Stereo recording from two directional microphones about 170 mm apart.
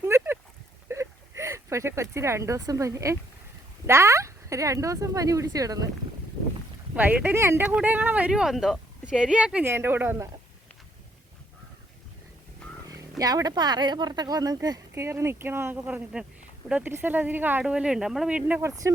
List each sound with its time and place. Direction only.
0.0 s a sound: 15° right (ahead or behind)
0.9 s speech: 15° right (ahead or behind)
6.9 s speech: 10° right (ahead or behind)
13.0 s speech: 20° right (ahead or behind)